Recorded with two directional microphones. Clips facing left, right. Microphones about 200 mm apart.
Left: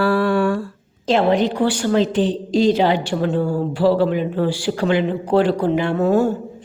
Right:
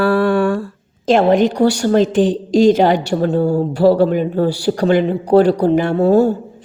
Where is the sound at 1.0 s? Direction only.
50° right (ahead or behind).